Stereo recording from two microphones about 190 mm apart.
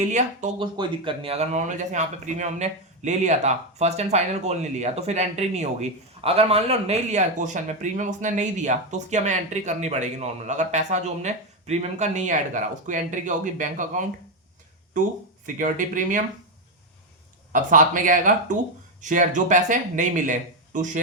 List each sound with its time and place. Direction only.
0.1 s speech: 40° right (ahead or behind)
0.6 s speech: 25° right (ahead or behind); by 14.0 s 45° right (ahead or behind)
15.4 s speech: 45° right (ahead or behind)
17.5 s speech: 45° right (ahead or behind)